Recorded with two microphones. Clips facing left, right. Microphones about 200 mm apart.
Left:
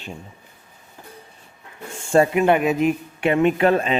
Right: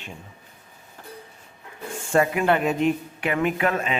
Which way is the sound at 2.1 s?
25° left (ahead or behind).